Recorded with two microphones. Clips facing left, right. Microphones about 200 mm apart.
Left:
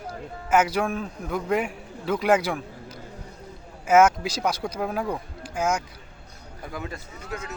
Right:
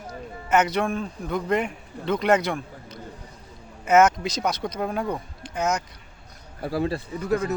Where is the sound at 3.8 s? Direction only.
5° left (ahead or behind).